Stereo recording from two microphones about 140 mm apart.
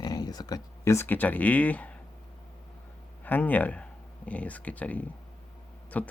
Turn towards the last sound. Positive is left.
turn(degrees=10)  # may be behind; listen again after turning